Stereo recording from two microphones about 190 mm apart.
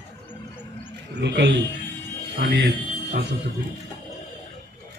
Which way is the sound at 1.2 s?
65° right (ahead or behind).